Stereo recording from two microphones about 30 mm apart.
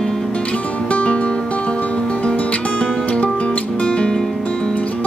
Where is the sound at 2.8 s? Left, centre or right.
Left.